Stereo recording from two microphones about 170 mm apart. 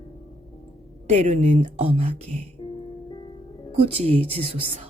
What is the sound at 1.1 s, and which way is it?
Speech, 45° right (ahead or behind).